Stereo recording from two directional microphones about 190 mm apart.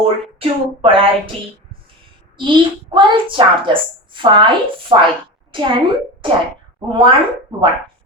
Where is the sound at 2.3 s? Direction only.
25° right (ahead or behind).